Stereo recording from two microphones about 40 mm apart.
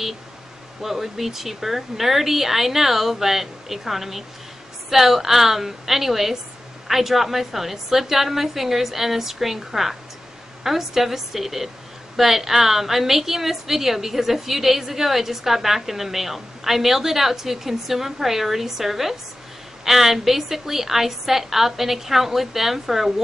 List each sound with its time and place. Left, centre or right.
0.8 s a woman's voice: centre